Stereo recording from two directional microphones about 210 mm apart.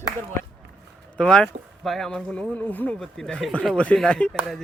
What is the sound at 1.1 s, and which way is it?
Speech, 5° left (ahead or behind).